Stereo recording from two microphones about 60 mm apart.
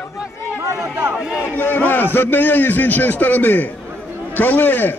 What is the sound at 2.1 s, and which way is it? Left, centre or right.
A man's voice, left.